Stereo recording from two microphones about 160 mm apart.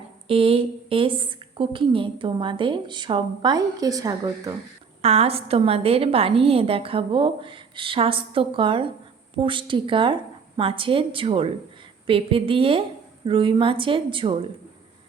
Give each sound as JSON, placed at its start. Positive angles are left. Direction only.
{"t": 0.3, "sound": "a woman's voice", "side_deg": -35}
{"t": 5.0, "sound": "a woman's voice", "side_deg": -40}